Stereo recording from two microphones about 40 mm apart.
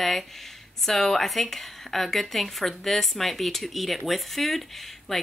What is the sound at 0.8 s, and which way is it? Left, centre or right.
Speech, centre.